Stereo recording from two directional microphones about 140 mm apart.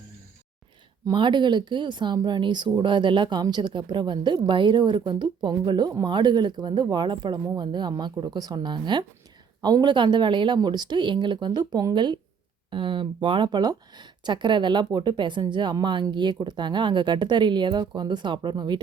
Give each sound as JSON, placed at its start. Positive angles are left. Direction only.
{"t": 1.0, "sound": "speech", "side_deg": -35}